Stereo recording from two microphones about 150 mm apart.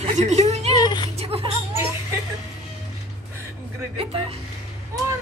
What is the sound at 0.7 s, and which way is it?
Music, 25° left (ahead or behind).